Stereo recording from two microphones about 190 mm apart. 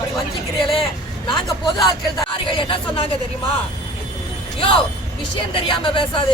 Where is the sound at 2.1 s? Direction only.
25° left (ahead or behind).